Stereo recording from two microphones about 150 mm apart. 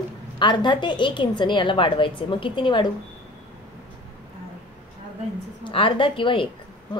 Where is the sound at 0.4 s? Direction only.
30° left (ahead or behind).